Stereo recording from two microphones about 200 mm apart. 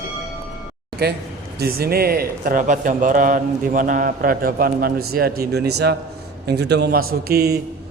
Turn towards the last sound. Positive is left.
turn(degrees=-55)  # may be behind; listen again after turning